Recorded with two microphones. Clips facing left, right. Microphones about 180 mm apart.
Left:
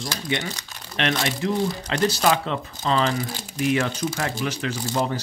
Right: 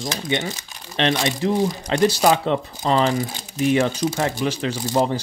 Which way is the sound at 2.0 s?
10° right (ahead or behind).